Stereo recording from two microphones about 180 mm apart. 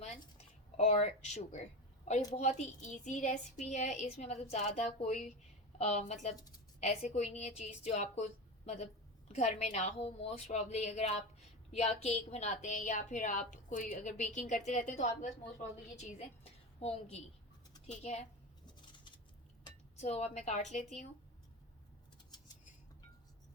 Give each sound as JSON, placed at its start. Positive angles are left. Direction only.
{"t": 0.0, "sound": "a sound", "side_deg": 35}
{"t": 2.3, "sound": "a woman's voice", "side_deg": 40}
{"t": 6.3, "sound": "a woman's voice", "side_deg": 20}
{"t": 7.1, "sound": "a woman's voice", "side_deg": 40}
{"t": 18.6, "sound": "a sound", "side_deg": 25}
{"t": 20.0, "sound": "a woman's voice", "side_deg": 40}